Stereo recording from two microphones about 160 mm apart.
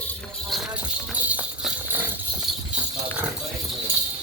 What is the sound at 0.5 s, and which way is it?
Clip-clop, centre (ahead or behind).